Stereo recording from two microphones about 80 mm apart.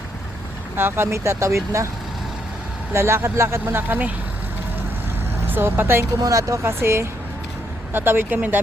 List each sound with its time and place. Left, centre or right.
0.8 s speech: right
2.9 s speech: right
5.5 s speech: right
6.1 s speech: right